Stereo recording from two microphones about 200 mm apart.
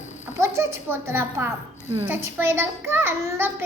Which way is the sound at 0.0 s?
35° left (ahead or behind).